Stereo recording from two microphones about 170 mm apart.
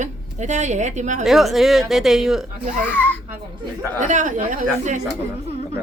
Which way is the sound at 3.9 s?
45° right (ahead or behind).